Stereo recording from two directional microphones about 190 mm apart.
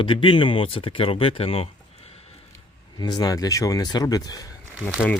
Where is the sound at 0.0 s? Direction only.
25° left (ahead or behind).